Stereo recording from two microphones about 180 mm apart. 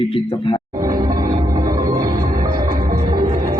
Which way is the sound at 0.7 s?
20° right (ahead or behind).